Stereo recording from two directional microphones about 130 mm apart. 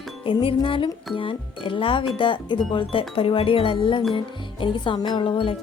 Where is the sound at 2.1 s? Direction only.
40° left (ahead or behind).